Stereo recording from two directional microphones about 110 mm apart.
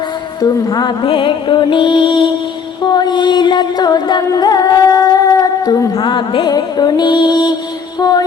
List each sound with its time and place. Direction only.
0.4 s music: 40° left (ahead or behind)
6.1 s music: 45° left (ahead or behind)